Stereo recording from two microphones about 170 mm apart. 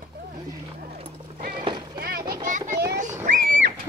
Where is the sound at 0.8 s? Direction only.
60° right (ahead or behind).